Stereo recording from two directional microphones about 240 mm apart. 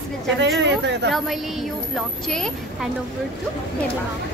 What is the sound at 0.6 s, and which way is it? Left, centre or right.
Speech, right.